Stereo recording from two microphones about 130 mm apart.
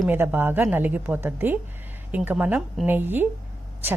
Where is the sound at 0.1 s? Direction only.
15° right (ahead or behind).